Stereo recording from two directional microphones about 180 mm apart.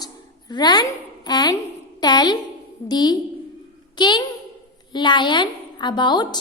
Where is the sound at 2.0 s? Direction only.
20° left (ahead or behind).